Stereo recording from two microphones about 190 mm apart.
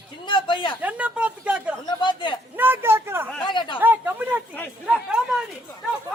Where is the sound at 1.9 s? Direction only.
25° left (ahead or behind).